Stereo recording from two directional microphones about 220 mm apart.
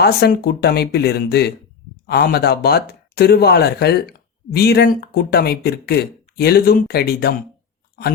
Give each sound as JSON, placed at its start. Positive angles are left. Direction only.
{"t": 0.0, "sound": "speech", "side_deg": 45}